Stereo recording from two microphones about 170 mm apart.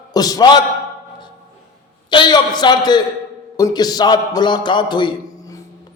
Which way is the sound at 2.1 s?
25° left (ahead or behind).